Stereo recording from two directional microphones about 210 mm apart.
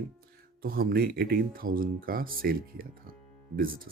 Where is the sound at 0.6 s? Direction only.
45° right (ahead or behind).